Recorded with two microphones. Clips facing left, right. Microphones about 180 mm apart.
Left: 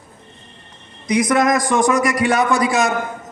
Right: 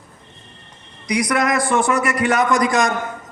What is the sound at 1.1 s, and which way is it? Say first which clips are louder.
A man's voice: left 3 dB; 20° left (ahead or behind).